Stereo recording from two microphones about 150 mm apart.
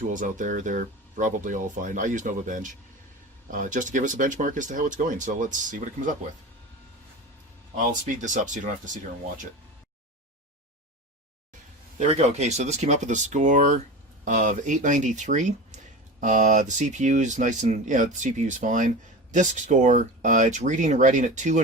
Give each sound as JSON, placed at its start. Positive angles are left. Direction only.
{"t": 0.0, "sound": "speech", "side_deg": -60}
{"t": 7.8, "sound": "speech", "side_deg": -55}
{"t": 11.9, "sound": "speech", "side_deg": -50}